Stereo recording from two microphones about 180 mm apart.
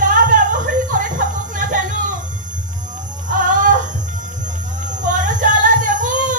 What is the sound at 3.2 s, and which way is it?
Music, 45° right (ahead or behind).